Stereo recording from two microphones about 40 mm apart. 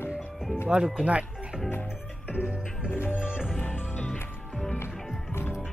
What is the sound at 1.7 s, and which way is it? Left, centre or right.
Music, left.